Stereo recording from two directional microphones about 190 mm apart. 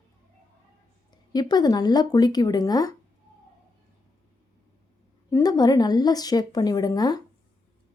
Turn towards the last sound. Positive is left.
turn(degrees=20)  # may be behind; listen again after turning